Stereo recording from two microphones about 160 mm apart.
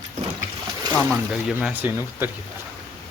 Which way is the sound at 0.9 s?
Centre (ahead or behind).